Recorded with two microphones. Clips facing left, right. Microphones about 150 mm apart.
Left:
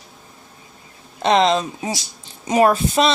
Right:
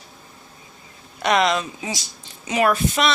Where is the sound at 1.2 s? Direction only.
30° left (ahead or behind).